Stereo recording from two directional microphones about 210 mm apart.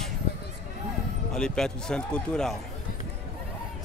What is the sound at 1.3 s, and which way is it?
Speech, 5° left (ahead or behind).